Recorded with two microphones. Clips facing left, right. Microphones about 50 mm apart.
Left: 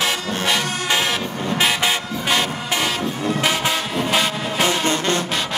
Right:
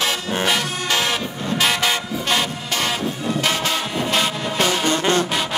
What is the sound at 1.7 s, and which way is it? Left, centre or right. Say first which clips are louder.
Music: even; centre.